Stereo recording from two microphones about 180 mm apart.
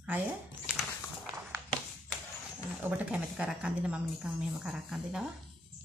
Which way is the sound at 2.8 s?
5° right (ahead or behind).